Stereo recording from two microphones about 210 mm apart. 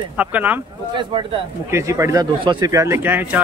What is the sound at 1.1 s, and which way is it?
Speech, 25° right (ahead or behind).